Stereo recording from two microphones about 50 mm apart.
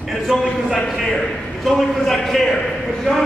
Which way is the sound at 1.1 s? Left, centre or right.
Centre.